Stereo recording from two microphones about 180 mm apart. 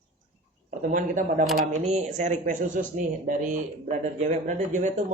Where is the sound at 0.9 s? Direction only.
45° right (ahead or behind).